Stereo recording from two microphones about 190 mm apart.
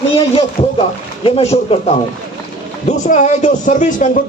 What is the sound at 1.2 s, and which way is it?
A man's voice, 30° left (ahead or behind).